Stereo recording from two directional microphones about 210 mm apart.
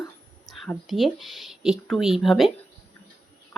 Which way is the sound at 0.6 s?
Centre (ahead or behind).